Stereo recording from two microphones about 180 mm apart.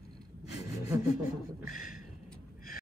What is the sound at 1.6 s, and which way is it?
Beatboxing, 50° left (ahead or behind).